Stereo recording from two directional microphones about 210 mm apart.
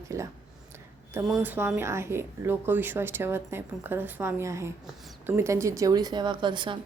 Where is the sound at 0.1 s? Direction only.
15° right (ahead or behind).